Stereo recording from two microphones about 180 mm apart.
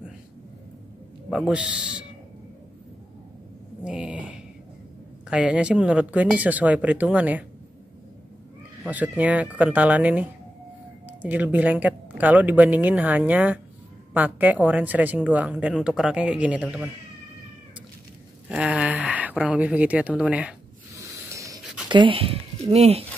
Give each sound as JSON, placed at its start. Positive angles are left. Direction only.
{"t": 1.5, "sound": "speech", "side_deg": -5}
{"t": 3.8, "sound": "a sound", "side_deg": -5}
{"t": 5.3, "sound": "a woman's voice", "side_deg": -5}
{"t": 8.8, "sound": "a woman's voice", "side_deg": -10}
{"t": 18.5, "sound": "speech", "side_deg": -5}
{"t": 21.3, "sound": "dog", "side_deg": -15}
{"t": 21.8, "sound": "speech", "side_deg": -25}